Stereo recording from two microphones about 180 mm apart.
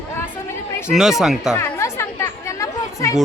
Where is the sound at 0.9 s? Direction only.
Centre (ahead or behind).